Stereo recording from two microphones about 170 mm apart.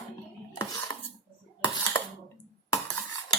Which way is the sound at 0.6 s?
20° left (ahead or behind).